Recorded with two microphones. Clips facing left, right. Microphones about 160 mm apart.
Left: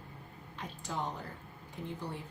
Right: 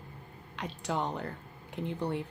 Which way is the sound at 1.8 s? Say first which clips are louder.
Right 6 dB; 90° right.